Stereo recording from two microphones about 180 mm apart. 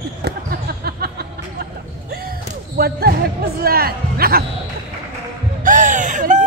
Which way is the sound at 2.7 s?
60° right (ahead or behind).